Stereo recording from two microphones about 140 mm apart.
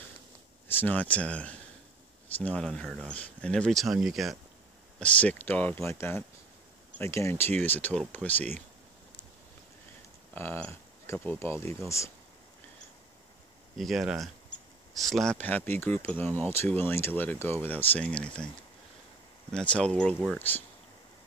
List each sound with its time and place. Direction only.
0.7 s speech: 15° left (ahead or behind)
4.9 s speech: 10° left (ahead or behind)
10.3 s speech: 15° left (ahead or behind)
13.7 s speech: centre (ahead or behind)
19.5 s speech: 5° left (ahead or behind)